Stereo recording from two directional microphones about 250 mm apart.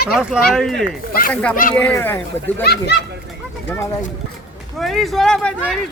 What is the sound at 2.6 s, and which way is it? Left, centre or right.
Speech, left.